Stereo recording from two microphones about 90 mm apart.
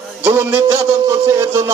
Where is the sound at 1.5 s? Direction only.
25° right (ahead or behind).